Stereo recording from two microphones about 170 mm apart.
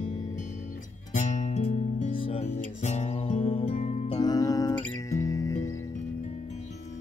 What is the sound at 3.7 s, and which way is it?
Music, 45° left (ahead or behind).